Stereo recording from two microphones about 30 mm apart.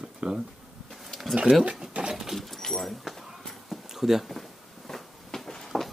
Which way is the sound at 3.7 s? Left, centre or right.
Centre.